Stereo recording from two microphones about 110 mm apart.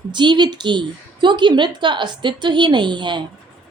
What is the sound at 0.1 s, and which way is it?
A woman's voice, 45° right (ahead or behind).